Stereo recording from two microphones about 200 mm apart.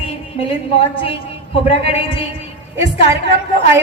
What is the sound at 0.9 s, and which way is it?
A woman's voice, 30° left (ahead or behind).